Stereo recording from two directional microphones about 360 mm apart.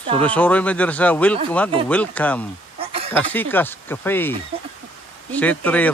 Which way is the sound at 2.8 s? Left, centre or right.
Centre.